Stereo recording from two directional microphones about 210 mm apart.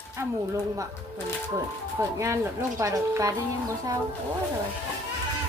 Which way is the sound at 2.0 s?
15° right (ahead or behind).